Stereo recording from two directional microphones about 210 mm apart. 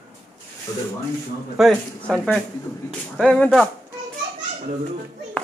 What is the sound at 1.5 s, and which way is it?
Speech, centre (ahead or behind).